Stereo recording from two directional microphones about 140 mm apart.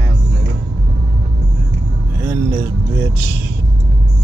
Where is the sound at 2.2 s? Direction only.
15° right (ahead or behind).